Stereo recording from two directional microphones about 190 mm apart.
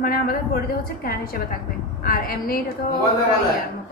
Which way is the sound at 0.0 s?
50° left (ahead or behind).